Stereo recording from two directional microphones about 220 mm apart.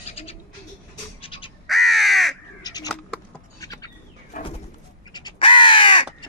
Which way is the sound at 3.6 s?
15° left (ahead or behind).